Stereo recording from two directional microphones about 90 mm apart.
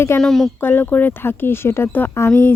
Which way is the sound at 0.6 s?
25° left (ahead or behind).